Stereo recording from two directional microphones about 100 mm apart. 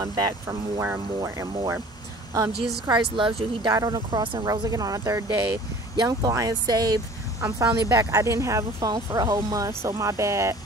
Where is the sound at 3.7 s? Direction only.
40° right (ahead or behind).